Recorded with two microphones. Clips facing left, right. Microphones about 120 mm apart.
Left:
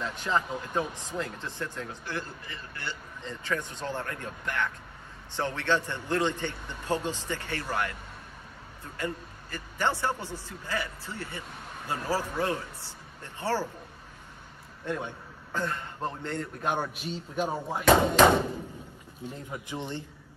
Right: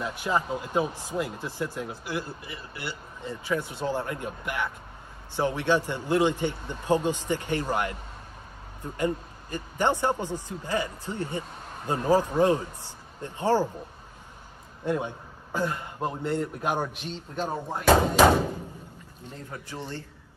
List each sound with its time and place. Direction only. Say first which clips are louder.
0.0 s a man's voice: right 2 dB; 10° right (ahead or behind)
14.9 s a man's voice: right 5 dB; 15° right (ahead or behind)
16.9 s speech: left 1 dB; 5° left (ahead or behind)
18.2 s speech: right 1 dB; 5° right (ahead or behind)
19.2 s speech: left 2 dB; 15° left (ahead or behind)